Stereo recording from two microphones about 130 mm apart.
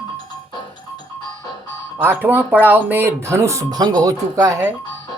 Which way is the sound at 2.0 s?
15° right (ahead or behind).